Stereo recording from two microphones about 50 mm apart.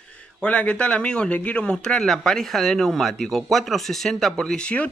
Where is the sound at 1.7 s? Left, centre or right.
Centre.